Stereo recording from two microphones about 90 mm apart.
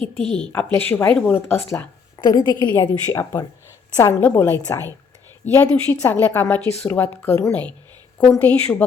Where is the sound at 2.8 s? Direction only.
30° left (ahead or behind).